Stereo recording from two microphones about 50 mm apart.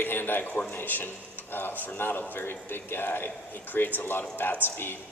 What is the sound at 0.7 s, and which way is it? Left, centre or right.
A man's voice, left.